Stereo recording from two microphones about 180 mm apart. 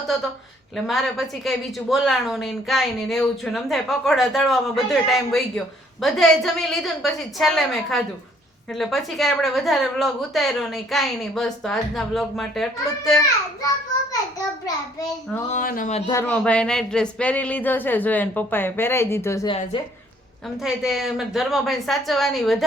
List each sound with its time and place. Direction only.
0.9 s speech: centre (ahead or behind)
14.1 s a child's voice: 20° left (ahead or behind)
15.5 s speech: 50° left (ahead or behind)
16.0 s speech: 15° left (ahead or behind)
19.5 s a child's voice: 25° left (ahead or behind)
20.6 s speech: centre (ahead or behind)